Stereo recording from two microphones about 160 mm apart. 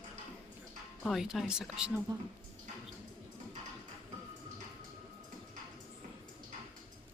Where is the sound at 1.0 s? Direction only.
Centre (ahead or behind).